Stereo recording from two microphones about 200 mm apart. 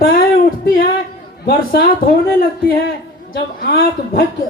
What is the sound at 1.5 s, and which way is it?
A woman's voice, 50° left (ahead or behind).